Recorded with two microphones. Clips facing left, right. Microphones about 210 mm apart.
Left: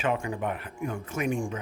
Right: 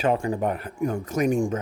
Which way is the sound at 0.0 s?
35° right (ahead or behind).